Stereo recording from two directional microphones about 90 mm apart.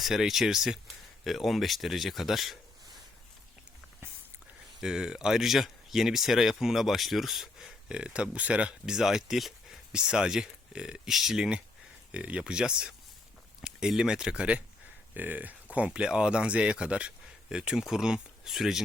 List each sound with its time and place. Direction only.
0.0 s speech: 5° right (ahead or behind)
4.8 s speech: 5° right (ahead or behind)